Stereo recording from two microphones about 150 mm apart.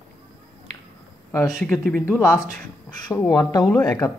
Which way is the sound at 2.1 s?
20° left (ahead or behind).